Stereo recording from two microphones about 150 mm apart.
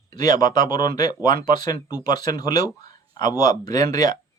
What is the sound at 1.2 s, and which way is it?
Speech, 65° right (ahead or behind).